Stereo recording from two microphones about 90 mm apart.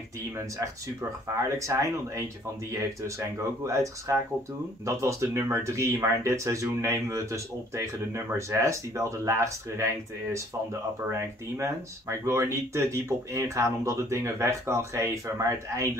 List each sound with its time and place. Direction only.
1.6 s speech: 35° right (ahead or behind)
11.1 s speech: 30° right (ahead or behind)